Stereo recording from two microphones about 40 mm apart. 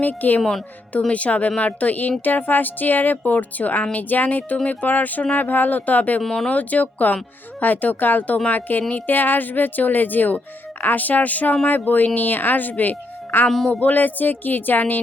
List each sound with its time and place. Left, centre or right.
0.0 s speech: left